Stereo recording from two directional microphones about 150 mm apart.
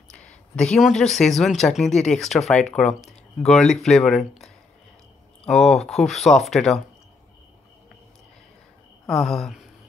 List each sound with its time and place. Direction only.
0.1 s speech: 5° left (ahead or behind)
2.9 s speech: 45° left (ahead or behind)
3.4 s speech: 5° left (ahead or behind)
5.4 s speech: centre (ahead or behind)
9.0 s speech: centre (ahead or behind)